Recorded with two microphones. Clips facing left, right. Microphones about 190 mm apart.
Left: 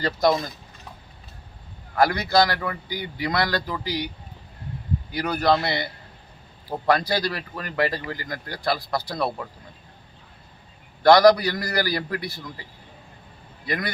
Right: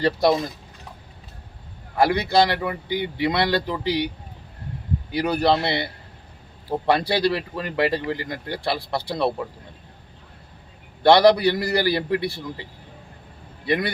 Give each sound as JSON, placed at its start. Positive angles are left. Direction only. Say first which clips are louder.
{"t": 0.0, "sound": "speech", "louder": "right 2 dB", "side_deg": -30}
{"t": 2.0, "sound": "speech", "louder": "right 1 dB", "side_deg": -25}
{"t": 5.3, "sound": "speech", "louder": "right 1 dB", "side_deg": -30}
{"t": 11.0, "sound": "speech", "louder": "even", "side_deg": -25}
{"t": 13.7, "sound": "speech", "louder": "right 5 dB", "side_deg": -25}